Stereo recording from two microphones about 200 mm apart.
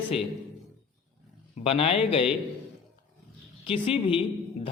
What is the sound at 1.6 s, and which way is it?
Speech, 25° left (ahead or behind).